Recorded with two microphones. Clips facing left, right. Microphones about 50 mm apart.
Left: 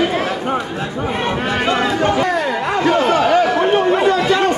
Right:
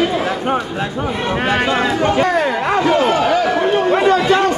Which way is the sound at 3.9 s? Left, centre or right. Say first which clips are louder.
Right 1 dB; right.